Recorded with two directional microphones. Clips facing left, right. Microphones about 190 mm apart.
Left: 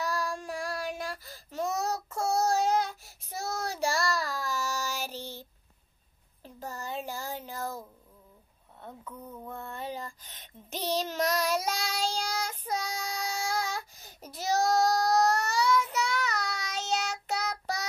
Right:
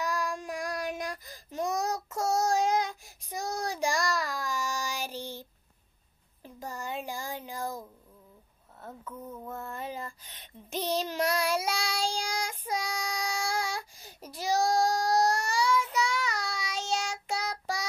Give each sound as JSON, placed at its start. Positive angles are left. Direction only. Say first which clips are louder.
{"t": 0.3, "sound": "child singing", "louder": "even", "side_deg": -15}
{"t": 6.4, "sound": "a sound", "louder": "right 1 dB", "side_deg": -15}
{"t": 9.1, "sound": "mantra", "louder": "right 2 dB", "side_deg": -5}
{"t": 10.7, "sound": "child singing", "louder": "right 1 dB", "side_deg": 35}
{"t": 11.1, "sound": "child singing", "louder": "even", "side_deg": -10}